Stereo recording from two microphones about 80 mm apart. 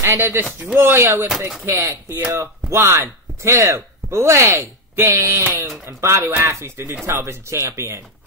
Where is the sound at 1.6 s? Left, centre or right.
Right.